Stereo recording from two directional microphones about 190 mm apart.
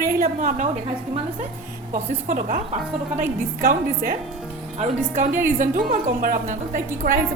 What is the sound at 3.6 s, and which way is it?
A woman's voice, 45° right (ahead or behind).